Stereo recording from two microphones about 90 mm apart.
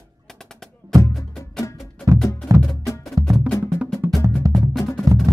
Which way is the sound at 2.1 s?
35° right (ahead or behind).